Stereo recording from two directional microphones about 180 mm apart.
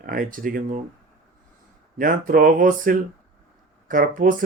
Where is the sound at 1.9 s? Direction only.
50° right (ahead or behind).